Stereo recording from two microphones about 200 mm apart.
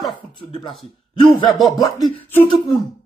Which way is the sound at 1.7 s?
15° left (ahead or behind).